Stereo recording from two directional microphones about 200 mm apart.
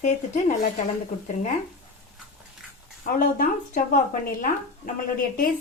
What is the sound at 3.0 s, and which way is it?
Speech, 45° left (ahead or behind).